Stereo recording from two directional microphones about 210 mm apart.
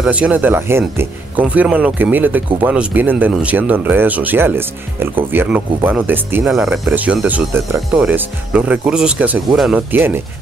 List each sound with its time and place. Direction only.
0.0 s speech: 5° right (ahead or behind)